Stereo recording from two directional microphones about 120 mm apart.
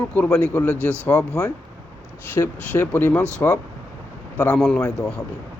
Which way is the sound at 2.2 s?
15° left (ahead or behind).